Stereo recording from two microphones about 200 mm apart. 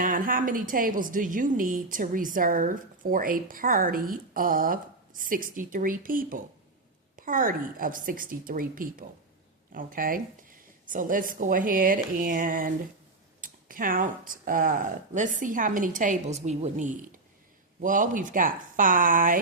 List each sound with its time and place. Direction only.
0.0 s a woman's voice: 40° right (ahead or behind)